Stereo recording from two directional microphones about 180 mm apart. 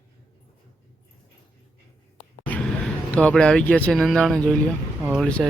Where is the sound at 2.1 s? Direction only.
5° left (ahead or behind).